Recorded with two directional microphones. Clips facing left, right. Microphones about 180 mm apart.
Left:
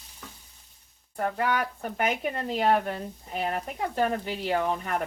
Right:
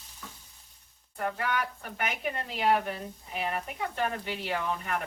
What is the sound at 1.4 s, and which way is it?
Speech, 50° left (ahead or behind).